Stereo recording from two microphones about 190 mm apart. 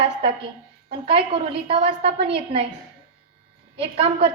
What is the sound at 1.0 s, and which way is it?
A woman's voice, 30° right (ahead or behind).